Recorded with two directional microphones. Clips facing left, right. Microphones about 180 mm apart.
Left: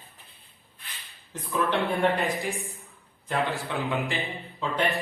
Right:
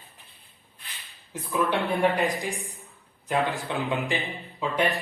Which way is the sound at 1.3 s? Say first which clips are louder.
Right 1 dB; 15° right (ahead or behind).